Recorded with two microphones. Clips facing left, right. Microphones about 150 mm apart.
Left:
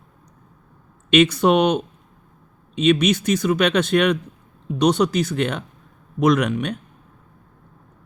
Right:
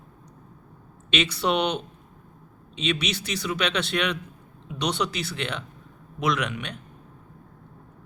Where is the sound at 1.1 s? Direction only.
50° left (ahead or behind).